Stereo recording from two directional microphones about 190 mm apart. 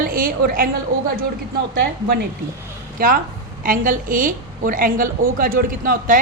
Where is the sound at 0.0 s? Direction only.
50° right (ahead or behind).